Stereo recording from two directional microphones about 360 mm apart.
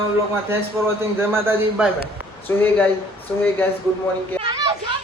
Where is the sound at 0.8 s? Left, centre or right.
Centre.